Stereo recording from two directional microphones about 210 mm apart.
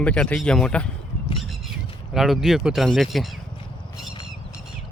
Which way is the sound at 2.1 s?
Centre (ahead or behind).